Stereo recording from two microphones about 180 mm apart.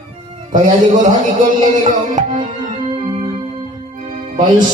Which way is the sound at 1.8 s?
45° right (ahead or behind).